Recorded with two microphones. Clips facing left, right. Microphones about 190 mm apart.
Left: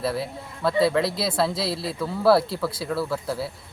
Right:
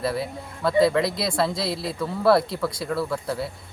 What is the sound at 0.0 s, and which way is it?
Speech, centre (ahead or behind).